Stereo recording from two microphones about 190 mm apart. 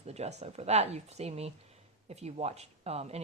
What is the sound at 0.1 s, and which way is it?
Speech, 35° right (ahead or behind).